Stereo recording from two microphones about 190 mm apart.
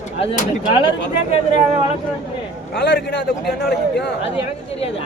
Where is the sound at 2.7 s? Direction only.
60° left (ahead or behind).